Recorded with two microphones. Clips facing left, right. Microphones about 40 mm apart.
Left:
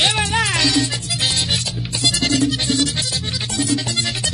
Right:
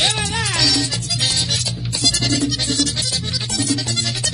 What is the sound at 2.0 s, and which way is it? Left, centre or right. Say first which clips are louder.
Music: left 1 dB; left.